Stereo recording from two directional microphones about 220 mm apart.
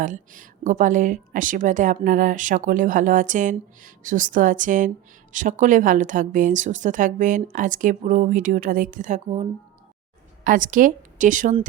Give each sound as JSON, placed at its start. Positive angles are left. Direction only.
{"t": 0.0, "sound": "speech", "side_deg": -35}